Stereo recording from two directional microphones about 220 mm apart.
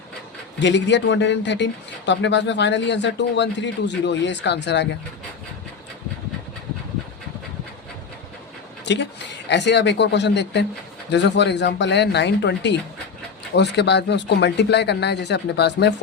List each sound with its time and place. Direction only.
0.6 s speech: 55° left (ahead or behind)
8.8 s speech: 50° left (ahead or behind)